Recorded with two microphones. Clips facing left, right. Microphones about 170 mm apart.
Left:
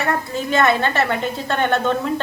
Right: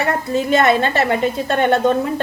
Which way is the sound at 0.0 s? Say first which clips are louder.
Right 4 dB; 20° right (ahead or behind).